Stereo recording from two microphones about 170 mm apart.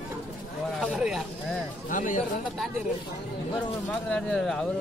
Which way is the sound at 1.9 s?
50° left (ahead or behind).